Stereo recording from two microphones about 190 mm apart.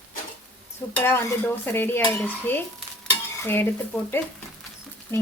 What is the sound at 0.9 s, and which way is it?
Dishes, 10° left (ahead or behind).